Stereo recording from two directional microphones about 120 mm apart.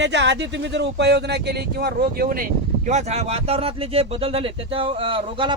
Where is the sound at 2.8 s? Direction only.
70° right (ahead or behind); by 5.5 s 45° right (ahead or behind).